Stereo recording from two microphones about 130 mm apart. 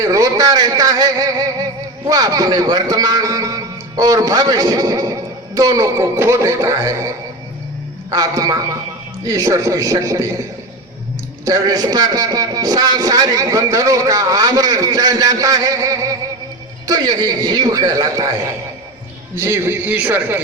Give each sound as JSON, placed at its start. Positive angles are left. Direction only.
{"t": 0.0, "sound": "a man's voice", "side_deg": -25}
{"t": 8.1, "sound": "a man's voice", "side_deg": -30}
{"t": 11.4, "sound": "a man's voice", "side_deg": -25}
{"t": 19.4, "sound": "a man's voice", "side_deg": -20}